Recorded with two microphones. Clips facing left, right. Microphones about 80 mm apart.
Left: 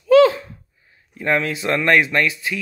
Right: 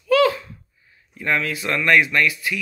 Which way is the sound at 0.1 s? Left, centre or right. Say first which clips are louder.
Left 5 dB; left.